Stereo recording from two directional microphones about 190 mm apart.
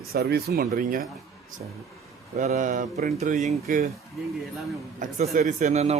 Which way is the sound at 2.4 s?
40° right (ahead or behind).